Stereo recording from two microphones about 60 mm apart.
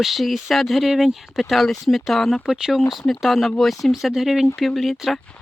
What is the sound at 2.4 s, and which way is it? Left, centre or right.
Speech, centre.